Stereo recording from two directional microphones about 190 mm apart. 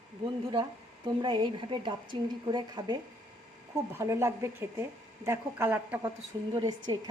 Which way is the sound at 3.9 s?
15° right (ahead or behind).